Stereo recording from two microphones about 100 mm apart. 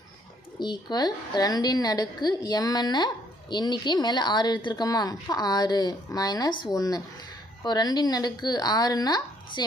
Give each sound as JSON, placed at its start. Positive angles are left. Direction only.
{"t": 0.6, "sound": "a woman's voice", "side_deg": 45}